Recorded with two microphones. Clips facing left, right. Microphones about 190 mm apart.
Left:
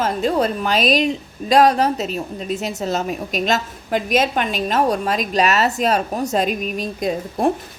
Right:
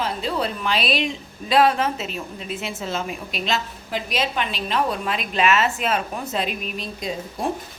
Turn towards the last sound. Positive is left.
turn(degrees=50)  # may be behind; listen again after turning